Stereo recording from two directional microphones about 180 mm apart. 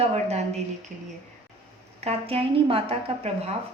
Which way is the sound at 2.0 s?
30° right (ahead or behind).